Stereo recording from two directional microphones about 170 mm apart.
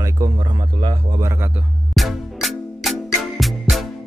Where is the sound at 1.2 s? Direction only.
15° right (ahead or behind).